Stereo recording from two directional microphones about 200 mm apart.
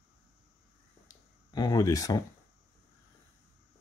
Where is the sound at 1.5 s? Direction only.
20° left (ahead or behind).